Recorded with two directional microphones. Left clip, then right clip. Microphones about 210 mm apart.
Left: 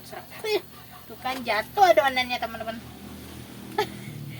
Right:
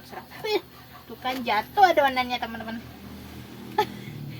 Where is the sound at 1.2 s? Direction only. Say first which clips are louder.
Right 1 dB; 15° right (ahead or behind).